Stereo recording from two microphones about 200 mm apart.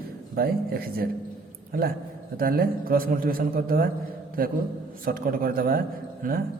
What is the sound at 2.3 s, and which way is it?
A man's voice, 45° right (ahead or behind).